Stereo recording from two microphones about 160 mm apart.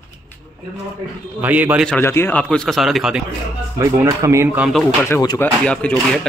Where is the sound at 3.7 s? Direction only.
20° right (ahead or behind).